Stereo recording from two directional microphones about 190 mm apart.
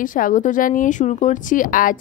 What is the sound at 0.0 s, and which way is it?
Speech, 45° left (ahead or behind).